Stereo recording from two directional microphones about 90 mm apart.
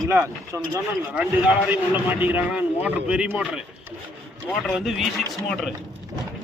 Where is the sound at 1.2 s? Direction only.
15° right (ahead or behind).